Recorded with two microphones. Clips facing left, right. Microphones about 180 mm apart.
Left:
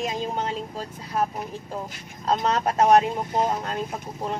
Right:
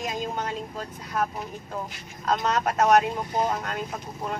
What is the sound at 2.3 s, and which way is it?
Speech, 30° left (ahead or behind).